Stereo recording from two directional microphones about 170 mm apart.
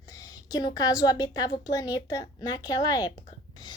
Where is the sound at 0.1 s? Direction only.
20° left (ahead or behind).